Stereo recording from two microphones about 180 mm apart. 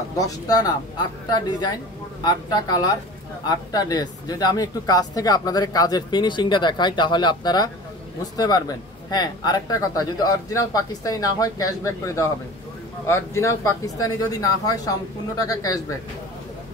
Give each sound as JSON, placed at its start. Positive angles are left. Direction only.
{"t": 0.2, "sound": "speech", "side_deg": 20}